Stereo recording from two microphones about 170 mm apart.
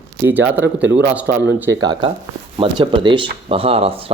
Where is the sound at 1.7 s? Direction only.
25° right (ahead or behind).